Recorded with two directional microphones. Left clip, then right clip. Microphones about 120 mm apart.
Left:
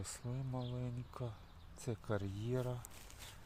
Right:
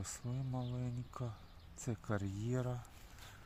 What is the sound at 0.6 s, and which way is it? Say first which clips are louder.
Speech: even; 5° left (ahead or behind).